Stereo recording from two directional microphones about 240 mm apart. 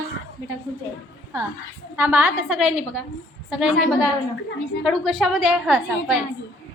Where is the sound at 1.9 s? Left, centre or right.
Centre.